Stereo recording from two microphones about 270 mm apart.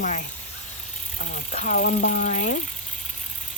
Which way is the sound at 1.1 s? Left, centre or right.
Left.